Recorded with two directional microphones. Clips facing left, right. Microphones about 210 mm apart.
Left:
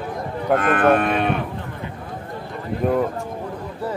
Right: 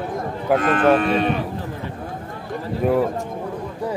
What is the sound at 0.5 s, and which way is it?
Speech, 55° left (ahead or behind).